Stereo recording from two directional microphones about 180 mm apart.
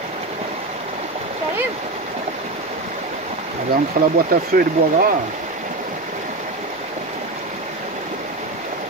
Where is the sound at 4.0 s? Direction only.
55° right (ahead or behind).